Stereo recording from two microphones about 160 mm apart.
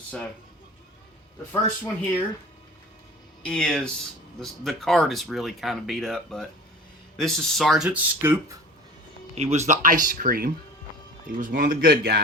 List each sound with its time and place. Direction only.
1.8 s speech: 10° left (ahead or behind)
3.4 s speech: 5° left (ahead or behind); by 8.4 s 10° right (ahead or behind)
9.3 s a man's voice: 45° right (ahead or behind); by 12.2 s 75° right (ahead or behind)